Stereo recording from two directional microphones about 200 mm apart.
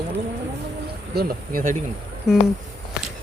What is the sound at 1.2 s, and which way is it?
Speech, 45° right (ahead or behind).